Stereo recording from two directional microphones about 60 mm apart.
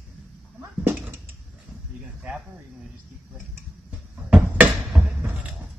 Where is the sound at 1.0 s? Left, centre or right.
Right.